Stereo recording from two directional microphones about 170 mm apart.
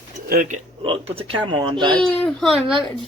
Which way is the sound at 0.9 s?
30° right (ahead or behind).